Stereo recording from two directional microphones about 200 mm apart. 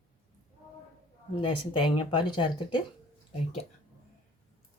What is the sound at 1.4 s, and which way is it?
Speech, 25° left (ahead or behind).